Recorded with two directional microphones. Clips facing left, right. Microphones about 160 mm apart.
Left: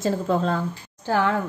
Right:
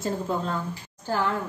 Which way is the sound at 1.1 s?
75° left (ahead or behind).